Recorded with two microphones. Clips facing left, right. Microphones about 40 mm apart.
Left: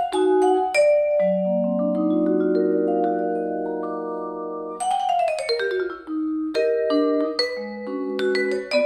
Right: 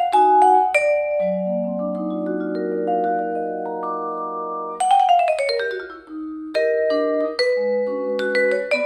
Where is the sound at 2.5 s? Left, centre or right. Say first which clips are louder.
Left 1 dB; centre.